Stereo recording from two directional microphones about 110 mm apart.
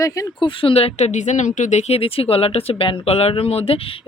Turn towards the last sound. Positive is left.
turn(degrees=60)  # may be behind; listen again after turning